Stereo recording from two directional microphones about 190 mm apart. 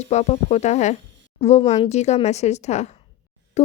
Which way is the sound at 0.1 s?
35° left (ahead or behind).